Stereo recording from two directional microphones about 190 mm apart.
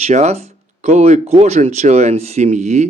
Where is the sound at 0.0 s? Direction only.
35° right (ahead or behind).